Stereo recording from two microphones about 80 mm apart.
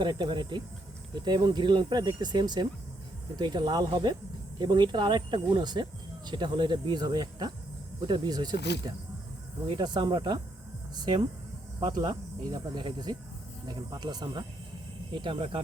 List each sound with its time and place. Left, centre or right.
0.0 s speech: right
1.2 s speech: right
10.9 s speech: right
15.1 s speech: right